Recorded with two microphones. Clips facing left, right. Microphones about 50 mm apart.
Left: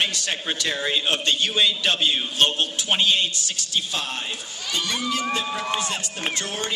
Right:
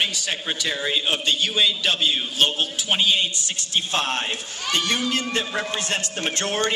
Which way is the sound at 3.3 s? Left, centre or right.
Right.